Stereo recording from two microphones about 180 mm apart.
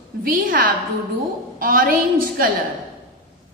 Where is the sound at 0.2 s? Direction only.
50° right (ahead or behind).